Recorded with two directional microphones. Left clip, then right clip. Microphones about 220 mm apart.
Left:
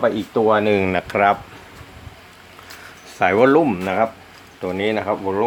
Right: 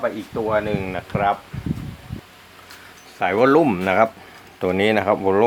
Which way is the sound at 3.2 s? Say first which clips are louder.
Left 4 dB; 15° left (ahead or behind).